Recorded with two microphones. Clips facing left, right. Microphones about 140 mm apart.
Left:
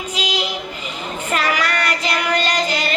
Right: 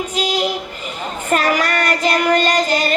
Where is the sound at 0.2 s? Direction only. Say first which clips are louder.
Right 5 dB; 45° right (ahead or behind).